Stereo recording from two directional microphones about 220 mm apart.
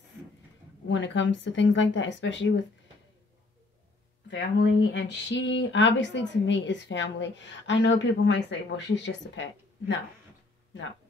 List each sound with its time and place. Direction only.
0.8 s speech: 55° left (ahead or behind)
4.3 s speech: 55° left (ahead or behind)